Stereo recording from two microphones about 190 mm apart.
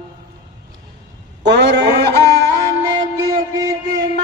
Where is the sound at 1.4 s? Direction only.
65° right (ahead or behind).